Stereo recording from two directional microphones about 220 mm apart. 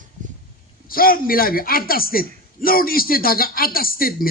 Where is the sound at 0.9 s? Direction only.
40° left (ahead or behind).